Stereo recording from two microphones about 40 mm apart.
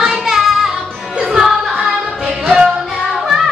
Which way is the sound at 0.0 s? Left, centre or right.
Centre.